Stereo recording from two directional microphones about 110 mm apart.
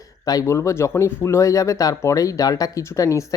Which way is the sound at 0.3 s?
30° left (ahead or behind).